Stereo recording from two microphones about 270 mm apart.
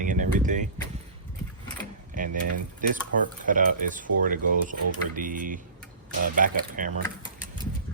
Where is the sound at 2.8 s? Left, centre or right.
Right.